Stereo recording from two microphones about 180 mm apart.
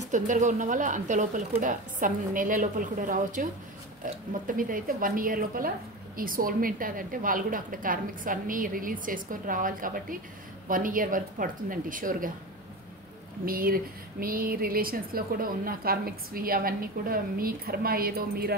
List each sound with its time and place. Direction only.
0.1 s a woman's voice: 45° right (ahead or behind)
13.5 s a woman's voice: 55° right (ahead or behind)